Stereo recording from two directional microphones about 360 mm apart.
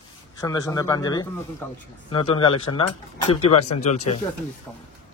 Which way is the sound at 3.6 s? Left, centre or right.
Left.